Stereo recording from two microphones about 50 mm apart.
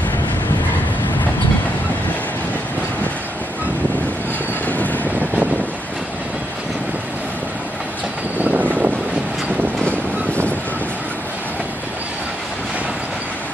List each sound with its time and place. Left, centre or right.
4.6 s train: left
8.4 s vehicle: right